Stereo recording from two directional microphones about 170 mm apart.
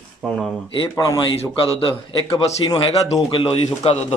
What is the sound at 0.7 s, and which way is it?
A man's voice, 25° left (ahead or behind).